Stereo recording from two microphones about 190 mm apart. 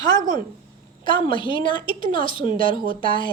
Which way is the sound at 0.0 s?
20° left (ahead or behind).